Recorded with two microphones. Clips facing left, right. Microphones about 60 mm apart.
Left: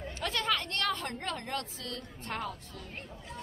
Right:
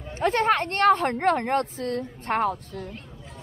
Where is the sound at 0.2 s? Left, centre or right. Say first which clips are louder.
Right 11 dB; right.